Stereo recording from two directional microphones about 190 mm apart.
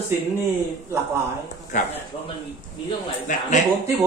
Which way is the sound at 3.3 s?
40° left (ahead or behind).